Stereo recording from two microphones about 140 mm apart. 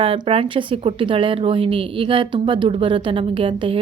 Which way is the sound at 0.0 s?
40° right (ahead or behind).